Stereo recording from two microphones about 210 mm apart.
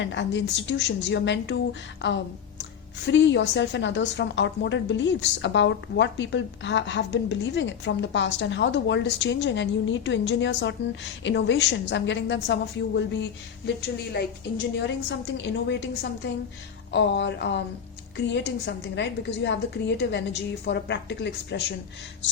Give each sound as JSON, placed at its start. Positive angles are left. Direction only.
{"t": 0.0, "sound": "a woman's voice", "side_deg": 60}
{"t": 14.8, "sound": "a woman's voice", "side_deg": 60}